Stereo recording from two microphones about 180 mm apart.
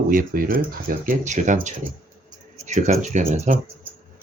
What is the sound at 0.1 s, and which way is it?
Speech, 50° right (ahead or behind).